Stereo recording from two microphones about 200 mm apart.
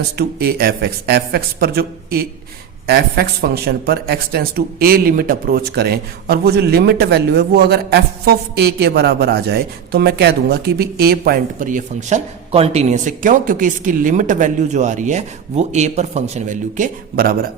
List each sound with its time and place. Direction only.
0.2 s speech: 50° right (ahead or behind)